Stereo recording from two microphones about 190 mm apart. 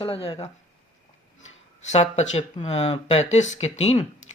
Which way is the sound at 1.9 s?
35° left (ahead or behind).